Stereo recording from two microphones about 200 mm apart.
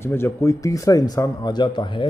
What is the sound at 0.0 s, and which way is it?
A man's voice, 10° left (ahead or behind).